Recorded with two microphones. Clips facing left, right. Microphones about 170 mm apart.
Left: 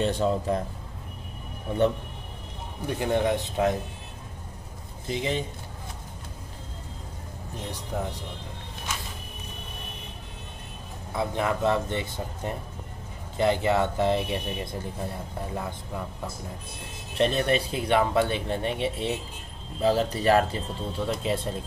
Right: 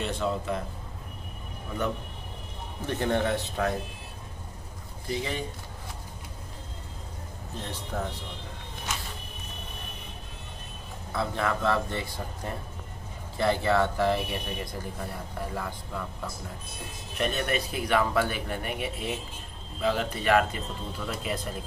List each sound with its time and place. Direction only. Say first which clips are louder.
0.0 s speech: left 5 dB; 35° left (ahead or behind)
2.9 s speech: left 2 dB; 15° left (ahead or behind)
5.0 s a man's voice: left 3 dB; 20° left (ahead or behind)
7.6 s speech: left 2 dB; 15° left (ahead or behind)
11.1 s a man's voice: left 2 dB; 20° left (ahead or behind)
17.2 s a man's voice: left 5 dB; 30° left (ahead or behind)